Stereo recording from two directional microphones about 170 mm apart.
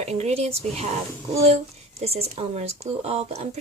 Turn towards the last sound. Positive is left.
turn(degrees=-40)  # may be behind; listen again after turning